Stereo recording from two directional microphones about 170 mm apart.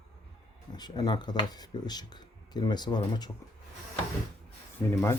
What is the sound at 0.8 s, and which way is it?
Speech, 25° left (ahead or behind).